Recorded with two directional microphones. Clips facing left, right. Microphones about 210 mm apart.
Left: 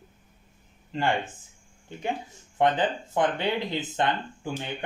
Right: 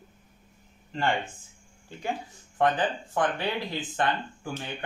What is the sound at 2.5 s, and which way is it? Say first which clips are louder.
Speech: left 1 dB; 20° left (ahead or behind).